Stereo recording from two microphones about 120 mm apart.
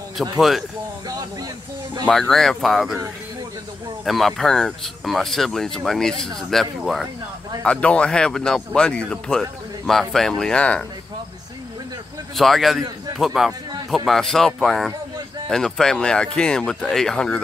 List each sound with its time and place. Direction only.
0.4 s speech: centre (ahead or behind)
1.0 s snake: 30° right (ahead or behind)
2.0 s speech: 5° left (ahead or behind)
4.0 s speech: centre (ahead or behind)
12.4 s speech: centre (ahead or behind)
13.5 s a sound: 35° right (ahead or behind)
13.8 s speech: centre (ahead or behind)